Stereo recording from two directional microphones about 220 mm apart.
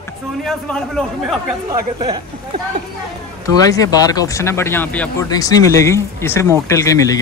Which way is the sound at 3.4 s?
15° left (ahead or behind).